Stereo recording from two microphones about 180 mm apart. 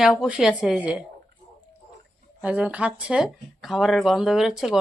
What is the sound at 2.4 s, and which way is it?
Speech, 5° right (ahead or behind).